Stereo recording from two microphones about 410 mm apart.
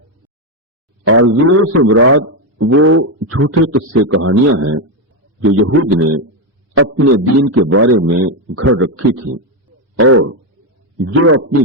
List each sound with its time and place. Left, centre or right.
1.0 s a man's voice: right